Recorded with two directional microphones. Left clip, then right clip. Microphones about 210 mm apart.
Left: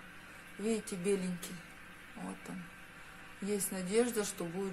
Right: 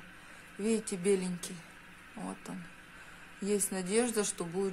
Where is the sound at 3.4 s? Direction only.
35° right (ahead or behind).